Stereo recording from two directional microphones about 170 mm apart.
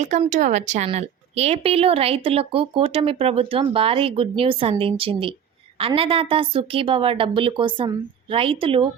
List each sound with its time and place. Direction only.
0.0 s speech: 45° right (ahead or behind)